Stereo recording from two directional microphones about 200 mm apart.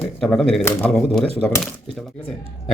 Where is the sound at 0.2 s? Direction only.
Centre (ahead or behind).